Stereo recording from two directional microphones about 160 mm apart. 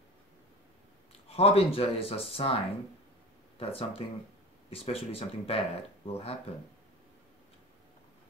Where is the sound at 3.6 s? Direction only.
35° left (ahead or behind).